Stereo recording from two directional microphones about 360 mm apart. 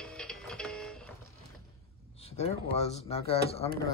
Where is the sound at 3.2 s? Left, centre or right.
Centre.